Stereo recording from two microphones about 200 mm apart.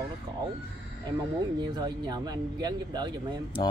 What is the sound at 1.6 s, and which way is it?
Speech, 20° right (ahead or behind).